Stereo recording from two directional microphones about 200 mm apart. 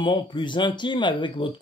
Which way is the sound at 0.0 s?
25° left (ahead or behind).